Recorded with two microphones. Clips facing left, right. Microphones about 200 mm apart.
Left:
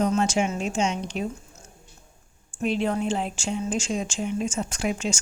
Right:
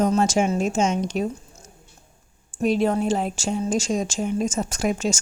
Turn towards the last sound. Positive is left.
turn(degrees=-40)  # may be behind; listen again after turning